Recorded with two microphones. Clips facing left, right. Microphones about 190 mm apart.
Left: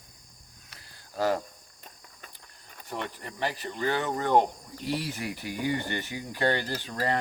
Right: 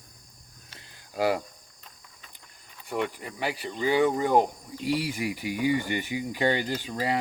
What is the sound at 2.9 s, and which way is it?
Speech, 10° right (ahead or behind).